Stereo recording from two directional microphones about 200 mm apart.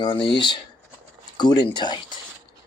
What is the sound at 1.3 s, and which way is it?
Speech, 20° left (ahead or behind).